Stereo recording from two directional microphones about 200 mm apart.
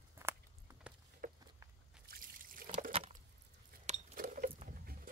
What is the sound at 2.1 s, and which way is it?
Trickle, 45° right (ahead or behind).